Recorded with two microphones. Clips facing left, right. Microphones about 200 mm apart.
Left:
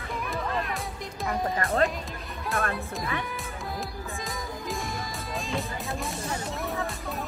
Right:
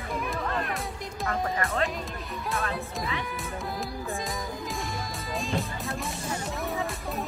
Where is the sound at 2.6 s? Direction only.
50° left (ahead or behind).